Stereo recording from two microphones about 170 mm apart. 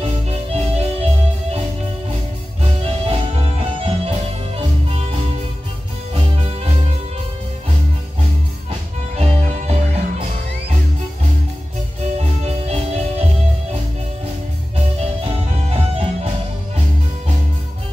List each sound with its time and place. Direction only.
0.0 s music: 35° right (ahead or behind)
2.8 s music: 35° right (ahead or behind)
9.1 s music: 40° right (ahead or behind)
12.2 s music: 35° right (ahead or behind)
15.0 s music: 35° right (ahead or behind)